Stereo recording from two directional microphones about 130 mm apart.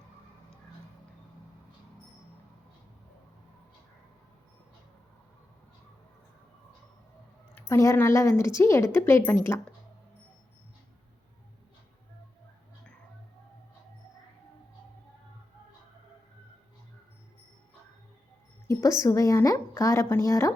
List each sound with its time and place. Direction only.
7.7 s a woman's voice: 20° left (ahead or behind)
18.7 s a woman's voice: 25° left (ahead or behind)